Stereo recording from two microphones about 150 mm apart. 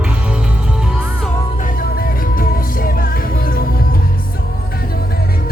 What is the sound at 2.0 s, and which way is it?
Music, 70° left (ahead or behind).